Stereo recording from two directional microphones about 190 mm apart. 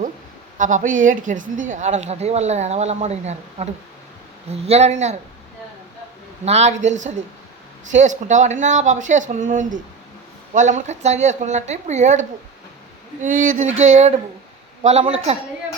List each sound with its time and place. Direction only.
0.6 s a woman's voice: 40° right (ahead or behind)
6.4 s a woman's voice: 35° right (ahead or behind)
13.2 s a woman's voice: 45° right (ahead or behind)